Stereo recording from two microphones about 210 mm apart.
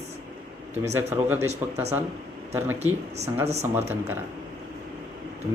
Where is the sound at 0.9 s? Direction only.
10° right (ahead or behind).